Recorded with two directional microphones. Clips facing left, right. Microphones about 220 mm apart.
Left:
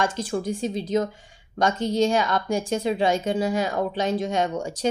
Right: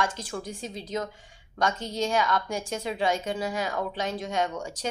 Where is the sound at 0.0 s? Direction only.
25° left (ahead or behind).